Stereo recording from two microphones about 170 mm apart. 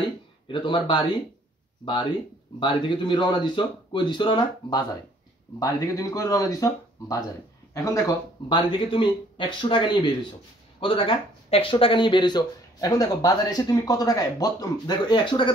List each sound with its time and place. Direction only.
0.5 s speech: 30° left (ahead or behind)
2.6 s speech: 30° left (ahead or behind)